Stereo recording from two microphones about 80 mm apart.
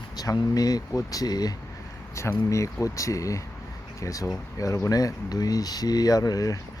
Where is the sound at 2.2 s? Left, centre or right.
Left.